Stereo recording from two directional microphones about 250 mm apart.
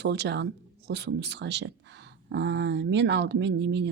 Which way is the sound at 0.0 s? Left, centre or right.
Right.